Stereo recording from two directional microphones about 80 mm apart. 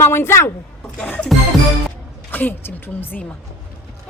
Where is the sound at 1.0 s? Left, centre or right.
Centre.